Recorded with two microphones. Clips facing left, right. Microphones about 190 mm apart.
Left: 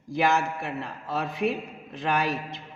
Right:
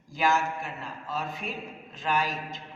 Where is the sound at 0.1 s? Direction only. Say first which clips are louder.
Left 2 dB; 60° left (ahead or behind).